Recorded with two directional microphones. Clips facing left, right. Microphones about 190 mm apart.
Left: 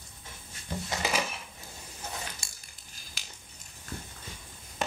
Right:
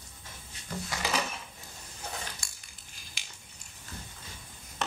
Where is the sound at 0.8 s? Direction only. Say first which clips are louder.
Left 1 dB; 20° left (ahead or behind).